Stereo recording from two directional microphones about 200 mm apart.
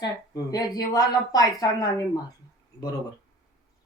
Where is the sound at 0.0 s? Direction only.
20° left (ahead or behind).